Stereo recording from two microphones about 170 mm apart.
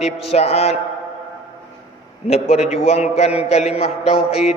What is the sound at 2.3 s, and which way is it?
A man's voice, 40° left (ahead or behind).